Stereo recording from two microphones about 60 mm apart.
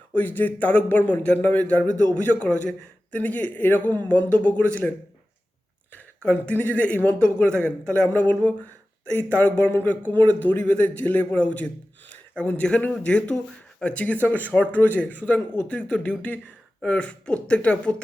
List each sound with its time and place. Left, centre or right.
0.1 s a man's voice: left